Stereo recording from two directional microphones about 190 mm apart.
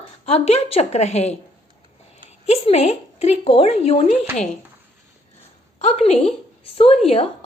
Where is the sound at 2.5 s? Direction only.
35° left (ahead or behind).